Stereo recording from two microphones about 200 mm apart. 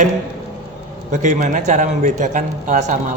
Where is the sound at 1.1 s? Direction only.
35° right (ahead or behind).